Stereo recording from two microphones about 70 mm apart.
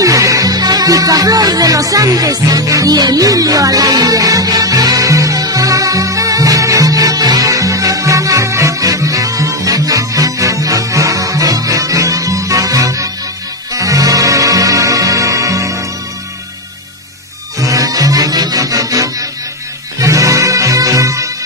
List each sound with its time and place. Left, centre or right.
0.0 s music: right
17.6 s music: right